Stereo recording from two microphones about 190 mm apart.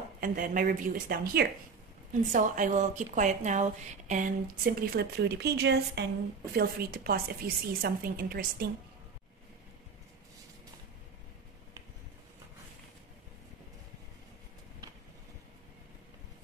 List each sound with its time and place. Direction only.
0.2 s a woman's voice: 45° right (ahead or behind)